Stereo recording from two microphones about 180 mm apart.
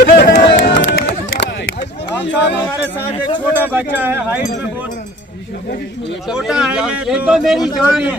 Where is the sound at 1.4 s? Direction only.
75° left (ahead or behind).